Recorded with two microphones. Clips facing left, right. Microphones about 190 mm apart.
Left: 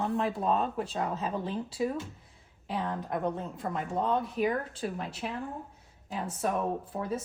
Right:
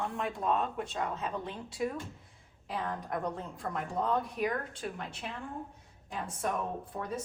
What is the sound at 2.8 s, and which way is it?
Speech, 25° left (ahead or behind).